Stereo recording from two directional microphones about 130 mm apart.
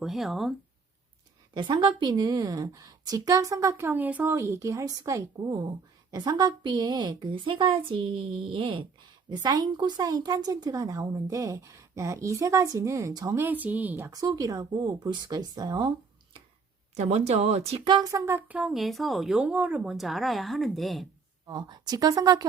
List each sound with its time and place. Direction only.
0.0 s speech: centre (ahead or behind)
1.5 s a woman's voice: 35° right (ahead or behind); by 14.1 s 15° right (ahead or behind)
14.1 s a woman's voice: 30° right (ahead or behind)
16.9 s speech: 55° right (ahead or behind)
17.8 s a woman's voice: 35° right (ahead or behind)
18.1 s speech: 15° right (ahead or behind); by 21.1 s centre (ahead or behind)
21.4 s a woman's voice: 35° right (ahead or behind)